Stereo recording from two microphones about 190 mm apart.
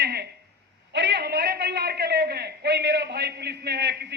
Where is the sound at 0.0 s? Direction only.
60° right (ahead or behind).